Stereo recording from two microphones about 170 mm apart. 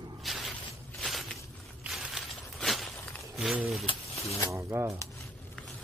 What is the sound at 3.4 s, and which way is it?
Speech, centre (ahead or behind).